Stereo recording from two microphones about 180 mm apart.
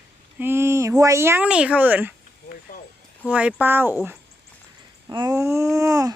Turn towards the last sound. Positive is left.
turn(degrees=-20)  # may be behind; listen again after turning